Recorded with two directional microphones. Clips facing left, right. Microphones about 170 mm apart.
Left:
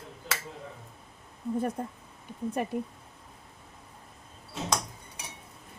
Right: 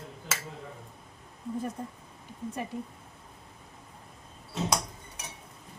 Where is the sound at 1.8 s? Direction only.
55° left (ahead or behind).